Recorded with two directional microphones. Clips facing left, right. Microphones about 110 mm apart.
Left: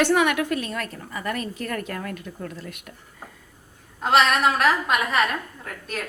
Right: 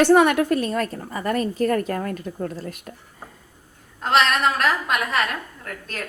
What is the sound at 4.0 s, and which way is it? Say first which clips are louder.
A woman's voice: even; 5° left (ahead or behind).